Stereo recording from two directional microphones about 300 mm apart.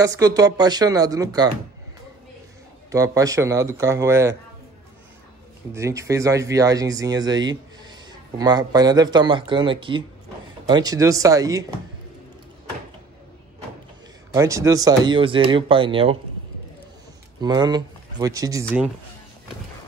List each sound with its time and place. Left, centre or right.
0.0 s speech: centre
2.9 s speech: centre
5.7 s a man's voice: centre
14.3 s speech: centre
17.4 s speech: centre